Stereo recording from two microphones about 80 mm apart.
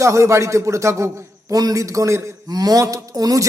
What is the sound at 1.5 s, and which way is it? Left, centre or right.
A man's voice, right.